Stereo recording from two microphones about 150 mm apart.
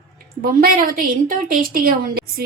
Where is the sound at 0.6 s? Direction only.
70° right (ahead or behind).